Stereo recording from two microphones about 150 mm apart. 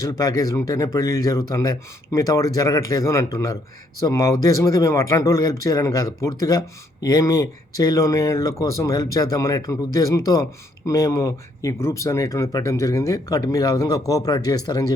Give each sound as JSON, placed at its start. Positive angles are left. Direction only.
{"t": 0.0, "sound": "speech", "side_deg": 25}